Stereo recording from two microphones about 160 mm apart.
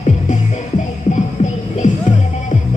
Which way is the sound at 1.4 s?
50° left (ahead or behind).